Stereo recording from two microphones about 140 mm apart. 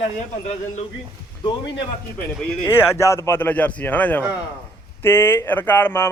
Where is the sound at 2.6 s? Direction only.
15° left (ahead or behind).